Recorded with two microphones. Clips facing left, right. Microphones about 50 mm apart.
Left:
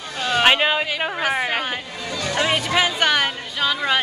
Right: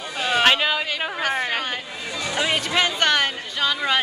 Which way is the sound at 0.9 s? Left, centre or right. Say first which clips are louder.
Left 2 dB; centre.